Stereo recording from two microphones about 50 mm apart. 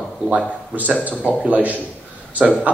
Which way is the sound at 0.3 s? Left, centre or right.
Right.